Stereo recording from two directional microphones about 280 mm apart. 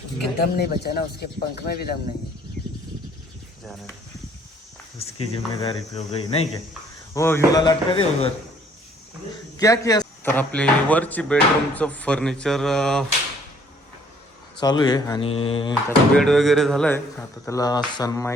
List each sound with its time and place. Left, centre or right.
0.4 s speech: left
5.3 s speech: left
7.1 s speech: centre
9.6 s speech: centre
14.6 s speech: centre
16.1 s speech: centre